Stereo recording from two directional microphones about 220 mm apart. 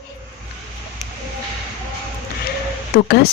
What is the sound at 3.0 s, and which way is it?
Speech, 45° left (ahead or behind).